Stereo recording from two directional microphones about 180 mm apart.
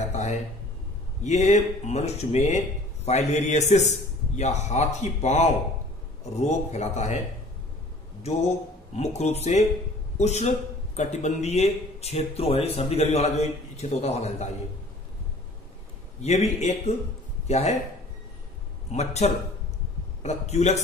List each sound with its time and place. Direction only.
0.1 s speech: 40° left (ahead or behind)
8.2 s speech: 35° left (ahead or behind)
16.2 s speech: 35° left (ahead or behind)
18.9 s speech: 40° left (ahead or behind)